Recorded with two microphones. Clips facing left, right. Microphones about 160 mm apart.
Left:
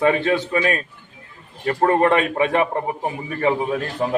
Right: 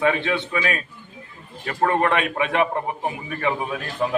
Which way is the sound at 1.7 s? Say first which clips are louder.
Left 4 dB; 35° left (ahead or behind).